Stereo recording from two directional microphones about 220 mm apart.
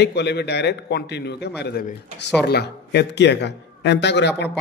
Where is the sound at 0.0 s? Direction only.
50° left (ahead or behind).